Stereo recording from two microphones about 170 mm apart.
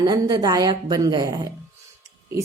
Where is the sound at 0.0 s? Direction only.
25° right (ahead or behind).